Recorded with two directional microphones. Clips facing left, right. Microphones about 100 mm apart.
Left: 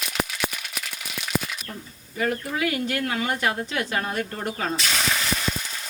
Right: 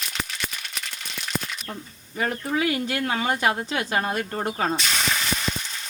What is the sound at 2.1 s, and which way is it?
Speech, 35° right (ahead or behind).